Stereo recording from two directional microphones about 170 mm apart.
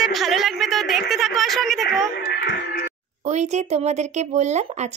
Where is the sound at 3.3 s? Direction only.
40° right (ahead or behind).